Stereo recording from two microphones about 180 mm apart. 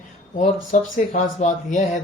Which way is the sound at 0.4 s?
40° left (ahead or behind).